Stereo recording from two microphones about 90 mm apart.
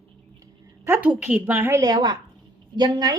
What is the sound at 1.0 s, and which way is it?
Speech, 15° right (ahead or behind).